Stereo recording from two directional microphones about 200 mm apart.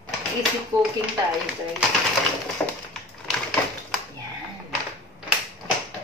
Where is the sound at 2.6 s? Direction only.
5° left (ahead or behind).